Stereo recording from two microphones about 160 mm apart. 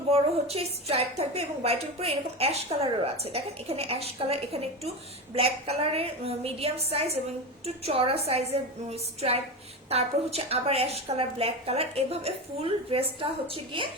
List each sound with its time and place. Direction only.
0.1 s a woman's voice: 40° right (ahead or behind)